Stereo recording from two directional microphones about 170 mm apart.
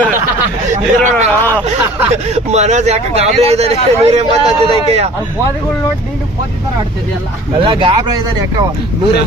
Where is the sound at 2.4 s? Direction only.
40° right (ahead or behind).